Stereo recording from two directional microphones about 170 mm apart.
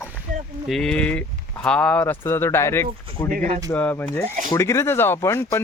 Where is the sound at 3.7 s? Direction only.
15° left (ahead or behind).